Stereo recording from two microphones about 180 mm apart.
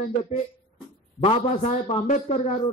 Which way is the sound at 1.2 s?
35° left (ahead or behind).